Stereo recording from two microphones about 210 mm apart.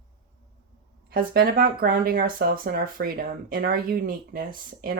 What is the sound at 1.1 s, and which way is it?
Speech, 45° right (ahead or behind).